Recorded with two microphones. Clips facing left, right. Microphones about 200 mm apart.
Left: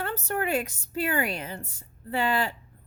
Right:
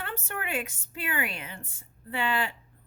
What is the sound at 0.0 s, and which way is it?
A woman's voice, 40° left (ahead or behind).